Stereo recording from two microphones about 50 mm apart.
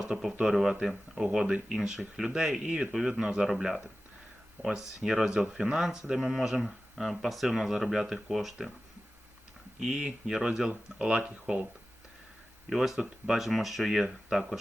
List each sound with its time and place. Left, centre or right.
0.1 s speech: centre
4.6 s speech: centre
9.8 s speech: centre
12.7 s speech: centre